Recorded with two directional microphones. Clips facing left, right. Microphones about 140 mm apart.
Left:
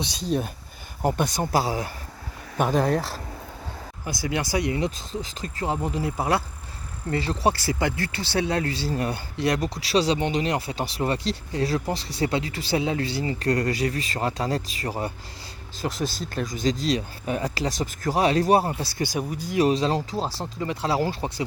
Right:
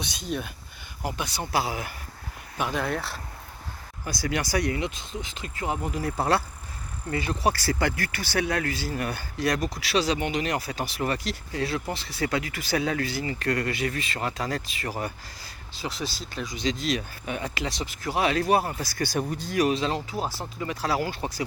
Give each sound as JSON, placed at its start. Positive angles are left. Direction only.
{"t": 0.0, "sound": "speech", "side_deg": 35}
{"t": 1.0, "sound": "speech", "side_deg": 45}
{"t": 4.0, "sound": "speech", "side_deg": 20}
{"t": 4.8, "sound": "speech", "side_deg": 35}
{"t": 6.1, "sound": "speech", "side_deg": 15}
{"t": 7.1, "sound": "speech", "side_deg": 30}
{"t": 7.6, "sound": "speech", "side_deg": 20}
{"t": 15.8, "sound": "speech", "side_deg": 45}
{"t": 18.8, "sound": "speech", "side_deg": 25}
{"t": 19.3, "sound": "speech", "side_deg": 10}
{"t": 19.5, "sound": "speech", "side_deg": 35}